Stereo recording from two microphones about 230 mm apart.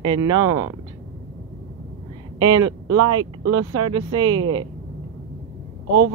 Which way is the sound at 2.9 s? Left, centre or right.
Right.